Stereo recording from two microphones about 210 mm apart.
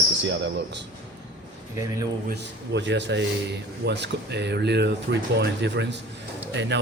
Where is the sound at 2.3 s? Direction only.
55° right (ahead or behind).